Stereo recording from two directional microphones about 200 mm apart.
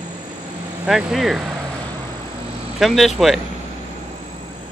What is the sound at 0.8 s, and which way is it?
Speech, centre (ahead or behind).